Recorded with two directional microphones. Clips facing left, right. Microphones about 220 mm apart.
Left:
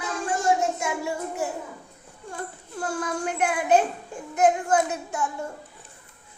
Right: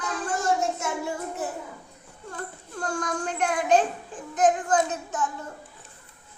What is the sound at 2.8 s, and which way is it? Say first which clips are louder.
A child's voice: left 1 dB; 5° left (ahead or behind).